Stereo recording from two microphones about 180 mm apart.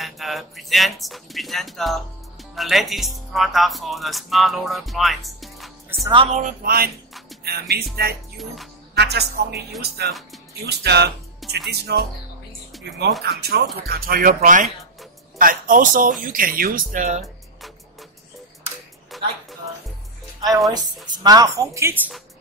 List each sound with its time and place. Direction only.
0.0 s speech: centre (ahead or behind)
6.1 s speech: 40° right (ahead or behind)
6.6 s speech: 55° right (ahead or behind)
12.7 s music: centre (ahead or behind)
13.2 s speech: 60° right (ahead or behind); by 17.2 s 40° right (ahead or behind)
19.1 s music: centre (ahead or behind)
20.7 s a woman's voice: 20° right (ahead or behind)